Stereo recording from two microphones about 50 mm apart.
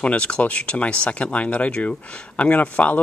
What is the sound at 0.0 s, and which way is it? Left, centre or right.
Speech, left.